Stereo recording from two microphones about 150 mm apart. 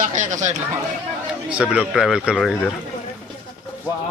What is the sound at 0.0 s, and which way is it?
Speech, 55° right (ahead or behind).